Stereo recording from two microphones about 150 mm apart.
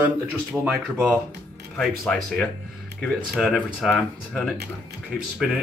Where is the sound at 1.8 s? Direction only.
5° left (ahead or behind).